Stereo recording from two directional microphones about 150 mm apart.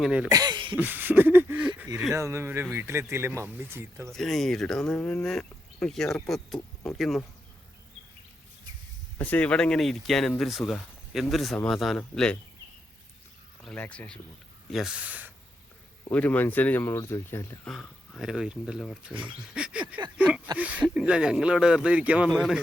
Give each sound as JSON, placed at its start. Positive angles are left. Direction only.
{"t": 0.0, "sound": "speech", "side_deg": -5}
{"t": 0.3, "sound": "speech", "side_deg": -25}
{"t": 0.8, "sound": "speech", "side_deg": -15}
{"t": 4.1, "sound": "speech", "side_deg": 5}
{"t": 9.1, "sound": "speech", "side_deg": 10}
{"t": 13.7, "sound": "speech", "side_deg": 10}
{"t": 14.7, "sound": "speech", "side_deg": 0}
{"t": 16.1, "sound": "speech", "side_deg": 10}
{"t": 17.7, "sound": "speech", "side_deg": 0}